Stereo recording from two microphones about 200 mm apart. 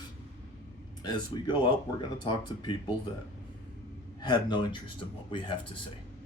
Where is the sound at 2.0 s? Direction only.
25° left (ahead or behind).